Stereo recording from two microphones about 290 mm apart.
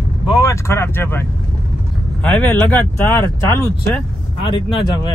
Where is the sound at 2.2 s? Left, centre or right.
Centre.